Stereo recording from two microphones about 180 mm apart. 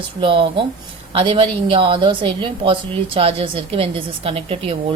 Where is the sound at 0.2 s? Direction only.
30° right (ahead or behind).